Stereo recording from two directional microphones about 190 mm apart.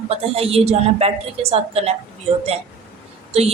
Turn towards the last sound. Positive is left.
turn(degrees=-35)  # may be behind; listen again after turning